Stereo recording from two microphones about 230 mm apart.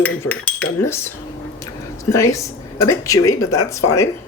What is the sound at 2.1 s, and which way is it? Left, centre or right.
Cutlery, centre.